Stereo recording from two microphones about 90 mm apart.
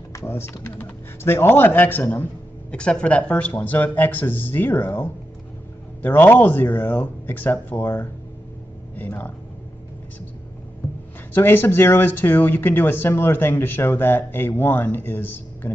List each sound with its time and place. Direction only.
0.1 s speech: 30° left (ahead or behind)
11.3 s speech: 25° left (ahead or behind)